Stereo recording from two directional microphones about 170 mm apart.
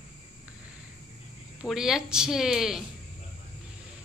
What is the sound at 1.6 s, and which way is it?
Speech, 5° right (ahead or behind).